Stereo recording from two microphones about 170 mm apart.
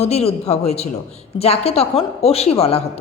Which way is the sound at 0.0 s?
35° left (ahead or behind).